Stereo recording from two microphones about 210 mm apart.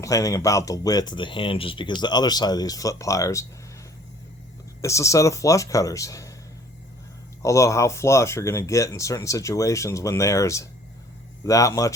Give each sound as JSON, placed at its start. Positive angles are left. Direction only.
{"t": 0.0, "sound": "speech", "side_deg": 15}
{"t": 4.8, "sound": "speech", "side_deg": 15}
{"t": 7.4, "sound": "speech", "side_deg": 15}